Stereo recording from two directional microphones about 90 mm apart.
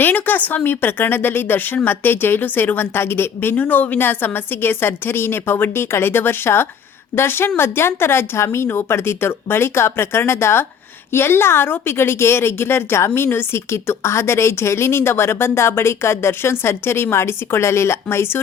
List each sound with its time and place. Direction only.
0.0 s a woman's voice: 20° left (ahead or behind)